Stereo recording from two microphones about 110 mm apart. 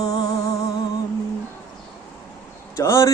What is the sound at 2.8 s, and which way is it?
Speech, 30° left (ahead or behind).